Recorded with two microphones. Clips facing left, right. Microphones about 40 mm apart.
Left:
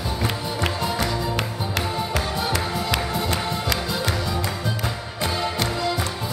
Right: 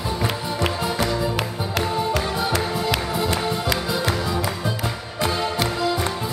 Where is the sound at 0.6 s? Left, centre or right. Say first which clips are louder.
Right 2 dB; centre.